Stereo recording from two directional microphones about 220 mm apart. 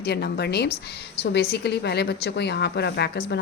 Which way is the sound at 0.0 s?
45° left (ahead or behind).